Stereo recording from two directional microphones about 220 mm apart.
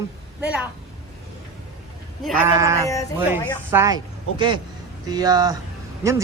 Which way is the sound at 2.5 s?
15° right (ahead or behind).